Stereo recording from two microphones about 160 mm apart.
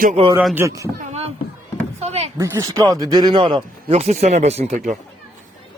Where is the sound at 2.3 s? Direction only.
20° right (ahead or behind); by 5.0 s 50° right (ahead or behind).